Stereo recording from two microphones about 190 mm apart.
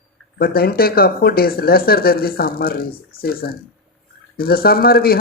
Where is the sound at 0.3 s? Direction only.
55° left (ahead or behind).